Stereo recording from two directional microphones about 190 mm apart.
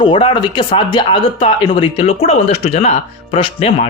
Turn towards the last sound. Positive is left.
turn(degrees=30)  # may be behind; listen again after turning